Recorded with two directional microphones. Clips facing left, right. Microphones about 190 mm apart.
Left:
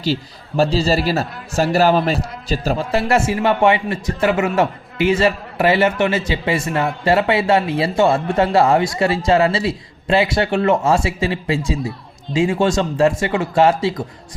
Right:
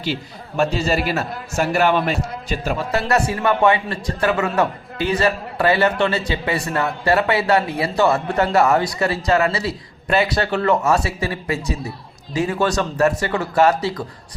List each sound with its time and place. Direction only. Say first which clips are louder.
0.0 s a man's voice: left 4 dB; 35° left (ahead or behind)